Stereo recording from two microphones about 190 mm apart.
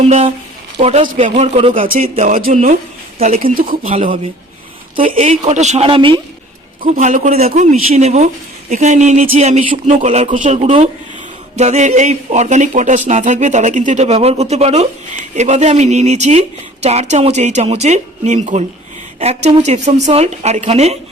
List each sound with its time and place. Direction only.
0.0 s a woman's voice: 35° right (ahead or behind)
6.8 s speech: 45° right (ahead or behind)